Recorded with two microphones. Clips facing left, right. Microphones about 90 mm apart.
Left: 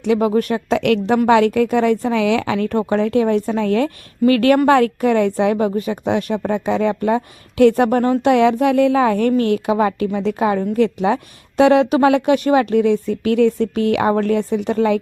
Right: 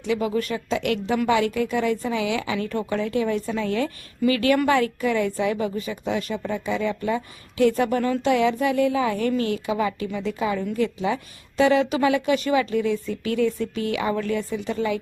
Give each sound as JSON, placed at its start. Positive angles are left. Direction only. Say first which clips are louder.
{"t": 0.0, "sound": "a woman's voice", "louder": "left 8 dB", "side_deg": 60}
{"t": 8.3, "sound": "a woman's voice", "louder": "left 7 dB", "side_deg": 65}